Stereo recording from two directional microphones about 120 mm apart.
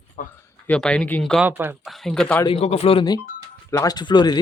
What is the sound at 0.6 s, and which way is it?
Speech, 10° left (ahead or behind).